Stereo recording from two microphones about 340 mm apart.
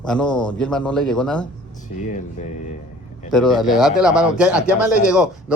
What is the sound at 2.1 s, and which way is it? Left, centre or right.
Speech, left.